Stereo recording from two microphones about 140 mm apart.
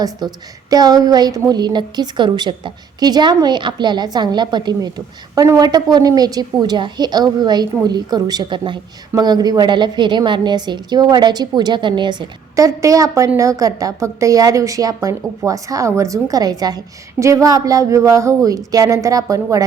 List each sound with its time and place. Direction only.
0.0 s a woman's voice: 30° right (ahead or behind)